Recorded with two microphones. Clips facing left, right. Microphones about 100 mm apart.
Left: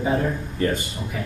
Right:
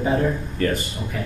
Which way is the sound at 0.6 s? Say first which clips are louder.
Even; 25° left (ahead or behind).